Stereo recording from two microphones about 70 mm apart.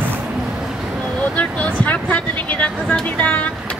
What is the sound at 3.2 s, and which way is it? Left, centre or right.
Speech, left.